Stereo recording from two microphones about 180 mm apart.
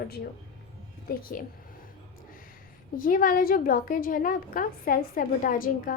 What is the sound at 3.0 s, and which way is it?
A woman's voice, 50° left (ahead or behind).